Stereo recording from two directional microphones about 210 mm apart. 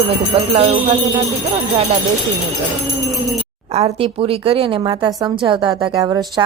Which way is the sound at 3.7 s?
30° right (ahead or behind).